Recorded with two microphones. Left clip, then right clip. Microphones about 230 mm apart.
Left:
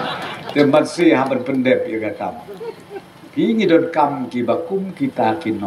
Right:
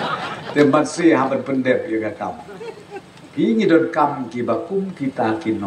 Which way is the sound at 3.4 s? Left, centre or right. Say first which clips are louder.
Left 1 dB; left.